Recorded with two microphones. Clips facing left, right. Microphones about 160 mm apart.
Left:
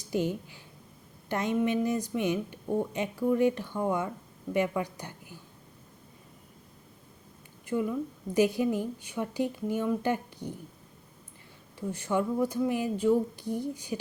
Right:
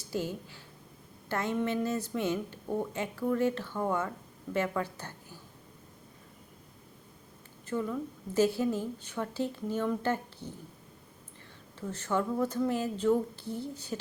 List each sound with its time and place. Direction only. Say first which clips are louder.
0.1 s a woman's voice: left 5 dB; 15° left (ahead or behind)
7.6 s a woman's voice: left 3 dB; 15° left (ahead or behind)
11.8 s a woman's voice: left 2 dB; 15° left (ahead or behind)